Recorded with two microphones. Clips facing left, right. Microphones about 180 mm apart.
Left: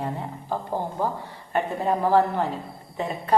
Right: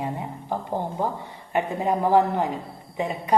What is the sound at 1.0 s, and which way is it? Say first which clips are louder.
A woman's voice: even; 20° right (ahead or behind).